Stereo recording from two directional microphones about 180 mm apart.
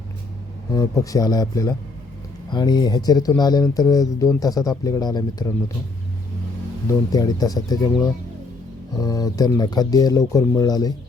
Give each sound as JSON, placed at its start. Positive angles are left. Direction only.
{"t": 0.7, "sound": "speech", "side_deg": 20}
{"t": 6.8, "sound": "speech", "side_deg": 20}